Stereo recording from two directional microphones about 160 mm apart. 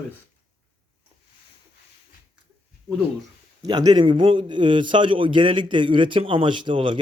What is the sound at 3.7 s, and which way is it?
A man's voice, 25° right (ahead or behind).